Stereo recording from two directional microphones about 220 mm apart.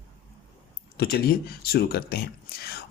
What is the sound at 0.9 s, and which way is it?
Speech, 45° left (ahead or behind).